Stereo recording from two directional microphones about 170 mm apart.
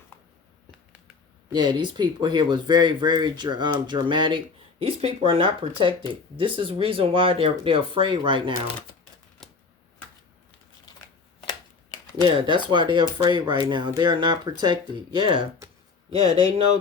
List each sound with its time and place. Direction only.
0.1 s a sound: 10° left (ahead or behind)
1.5 s speech: 25° right (ahead or behind)
9.4 s typewriter: centre (ahead or behind)
12.2 s speech: 30° right (ahead or behind)
16.1 s speech: 20° left (ahead or behind)